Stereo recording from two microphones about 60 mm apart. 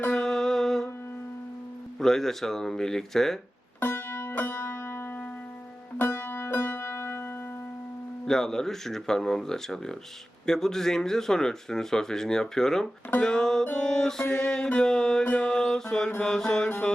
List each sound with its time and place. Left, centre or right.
0.1 s music: centre
2.0 s speech: centre
3.8 s music: left
8.3 s speech: centre
13.2 s music: centre
13.7 s speech: centre
14.3 s music: left
15.2 s mantra: left
15.4 s mantra: centre
16.2 s speech: centre